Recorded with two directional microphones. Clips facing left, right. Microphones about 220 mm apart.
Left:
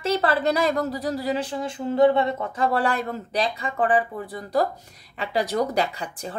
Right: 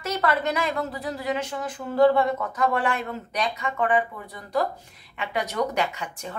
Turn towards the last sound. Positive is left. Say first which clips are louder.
# left 2 dB
turn(degrees=35)  # may be behind; listen again after turning